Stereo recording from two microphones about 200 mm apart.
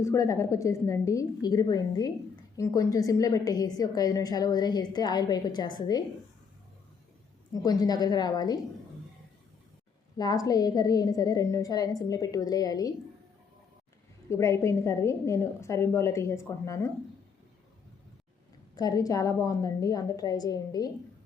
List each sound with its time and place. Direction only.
0.0 s a woman's voice: 15° left (ahead or behind)
7.5 s a woman's voice: 20° left (ahead or behind)
10.2 s a woman's voice: 20° left (ahead or behind)
14.3 s a woman's voice: 15° left (ahead or behind)
18.8 s a woman's voice: 15° left (ahead or behind)